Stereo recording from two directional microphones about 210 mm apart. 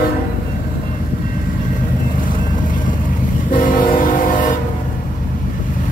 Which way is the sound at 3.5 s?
40° left (ahead or behind).